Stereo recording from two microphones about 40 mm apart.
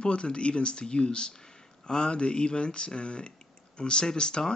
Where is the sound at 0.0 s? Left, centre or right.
Left.